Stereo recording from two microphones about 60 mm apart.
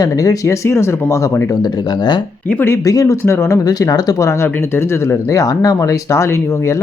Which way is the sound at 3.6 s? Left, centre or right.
Left.